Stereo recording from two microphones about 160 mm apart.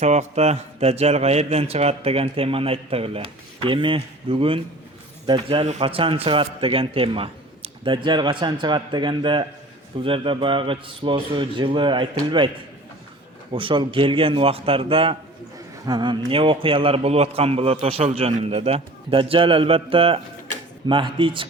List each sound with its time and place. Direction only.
0.0 s speech: 45° right (ahead or behind)
13.5 s speech: 30° right (ahead or behind)